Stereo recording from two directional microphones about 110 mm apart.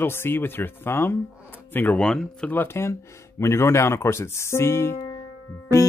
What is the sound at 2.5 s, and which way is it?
Speech, 20° left (ahead or behind).